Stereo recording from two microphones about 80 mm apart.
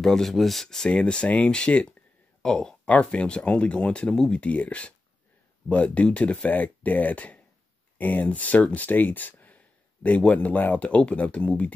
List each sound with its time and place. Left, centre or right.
0.0 s speech: centre